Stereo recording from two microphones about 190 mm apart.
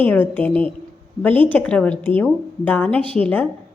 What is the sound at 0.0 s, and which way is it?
A woman's voice, 10° left (ahead or behind).